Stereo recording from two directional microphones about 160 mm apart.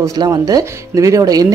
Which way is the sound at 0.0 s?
25° right (ahead or behind).